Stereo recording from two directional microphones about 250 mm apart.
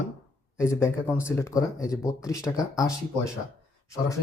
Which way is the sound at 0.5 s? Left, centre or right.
Centre.